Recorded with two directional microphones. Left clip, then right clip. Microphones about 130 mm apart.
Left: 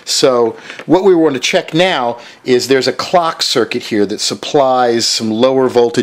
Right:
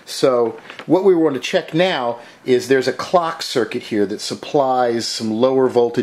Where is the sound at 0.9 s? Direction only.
40° left (ahead or behind).